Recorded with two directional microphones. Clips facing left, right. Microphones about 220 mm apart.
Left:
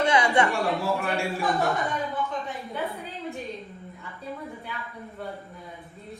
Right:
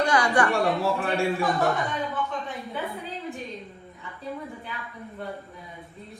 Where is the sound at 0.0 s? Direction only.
25° left (ahead or behind).